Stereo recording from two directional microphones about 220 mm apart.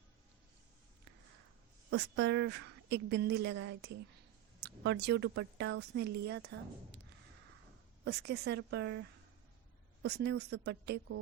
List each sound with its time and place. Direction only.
1.9 s speech: 50° right (ahead or behind)
8.0 s speech: 50° right (ahead or behind)